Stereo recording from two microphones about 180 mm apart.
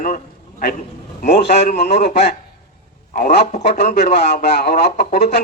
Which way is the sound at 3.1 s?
45° left (ahead or behind).